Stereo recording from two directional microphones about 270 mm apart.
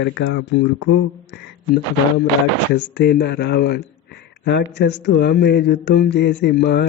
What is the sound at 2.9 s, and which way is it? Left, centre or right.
Speech, left.